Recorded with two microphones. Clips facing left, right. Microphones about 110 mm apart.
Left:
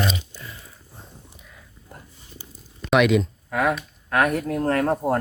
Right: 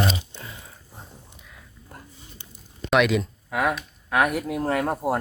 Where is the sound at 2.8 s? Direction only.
Centre (ahead or behind).